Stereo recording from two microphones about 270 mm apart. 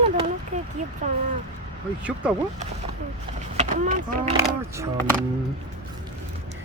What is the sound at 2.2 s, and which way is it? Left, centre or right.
Speech, centre.